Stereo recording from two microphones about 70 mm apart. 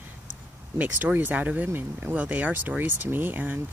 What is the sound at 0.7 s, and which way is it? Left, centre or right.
Speech, right.